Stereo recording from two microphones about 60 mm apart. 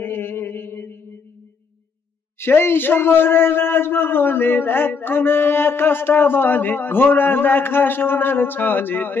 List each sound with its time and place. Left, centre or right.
0.0 s mantra: left
2.3 s a man's voice: left